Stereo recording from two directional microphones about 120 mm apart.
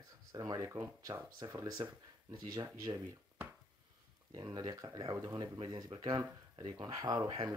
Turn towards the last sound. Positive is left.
turn(degrees=-35)  # may be behind; listen again after turning